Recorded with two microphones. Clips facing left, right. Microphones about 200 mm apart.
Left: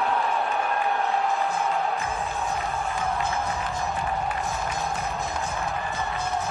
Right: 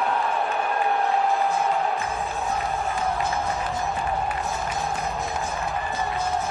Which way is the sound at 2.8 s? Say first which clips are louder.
Right 2 dB; 15° right (ahead or behind).